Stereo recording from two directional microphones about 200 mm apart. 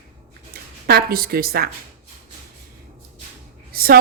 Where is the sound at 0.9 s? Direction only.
50° right (ahead or behind).